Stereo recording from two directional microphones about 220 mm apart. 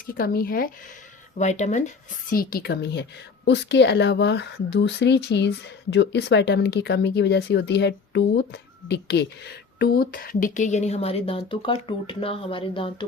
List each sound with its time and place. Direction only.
0.1 s speech: 40° left (ahead or behind)
1.4 s a woman's voice: 30° left (ahead or behind)